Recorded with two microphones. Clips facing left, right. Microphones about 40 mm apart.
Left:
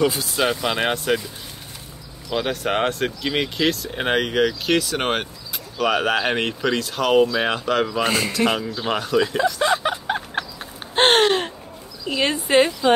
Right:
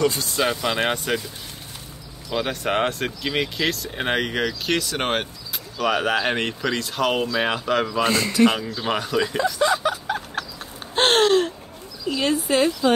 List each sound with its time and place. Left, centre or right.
0.0 s speech: centre
2.3 s speech: centre
9.8 s a sound: left
12.1 s speech: left